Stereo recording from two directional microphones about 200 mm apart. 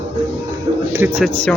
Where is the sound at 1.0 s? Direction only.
10° right (ahead or behind).